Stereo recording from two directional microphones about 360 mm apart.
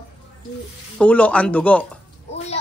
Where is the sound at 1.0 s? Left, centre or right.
Centre.